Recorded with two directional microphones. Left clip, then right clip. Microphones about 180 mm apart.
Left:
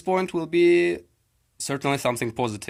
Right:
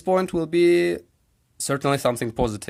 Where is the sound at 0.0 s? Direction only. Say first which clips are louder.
Right 3 dB; 45° right (ahead or behind).